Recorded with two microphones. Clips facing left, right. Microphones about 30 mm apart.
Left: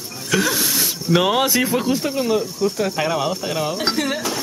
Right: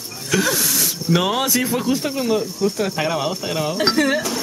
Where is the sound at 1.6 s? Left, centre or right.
Centre.